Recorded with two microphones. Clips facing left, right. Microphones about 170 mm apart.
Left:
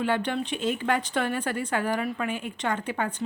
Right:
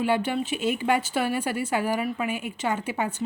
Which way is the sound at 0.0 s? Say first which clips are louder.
Right 2 dB; 10° right (ahead or behind).